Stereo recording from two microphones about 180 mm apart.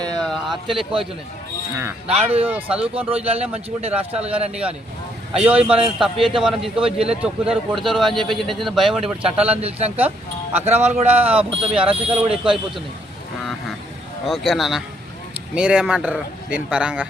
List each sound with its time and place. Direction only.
0.0 s a sound: 5° left (ahead or behind)
1.7 s speech: 15° right (ahead or behind)
2.2 s speech: 30° right (ahead or behind)
2.5 s speech: 5° right (ahead or behind)
3.2 s speech: 35° right (ahead or behind)
4.1 s speech: 10° right (ahead or behind)
5.5 s speech: 5° right (ahead or behind)
9.6 s speech: 35° right (ahead or behind)
12.3 s speech: 5° right (ahead or behind)
14.3 s speech: centre (ahead or behind)